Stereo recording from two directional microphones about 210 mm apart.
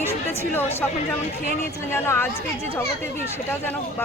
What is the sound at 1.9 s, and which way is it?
Speech, 10° left (ahead or behind).